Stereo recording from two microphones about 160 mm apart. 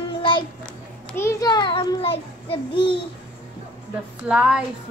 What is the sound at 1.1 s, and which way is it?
A child's voice, 20° left (ahead or behind).